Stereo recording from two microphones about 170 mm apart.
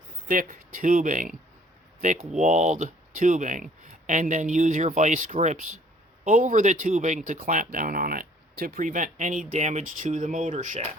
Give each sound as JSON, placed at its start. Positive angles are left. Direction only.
{"t": 0.3, "sound": "speech", "side_deg": -55}